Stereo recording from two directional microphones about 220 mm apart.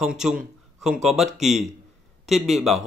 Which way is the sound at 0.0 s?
5° right (ahead or behind).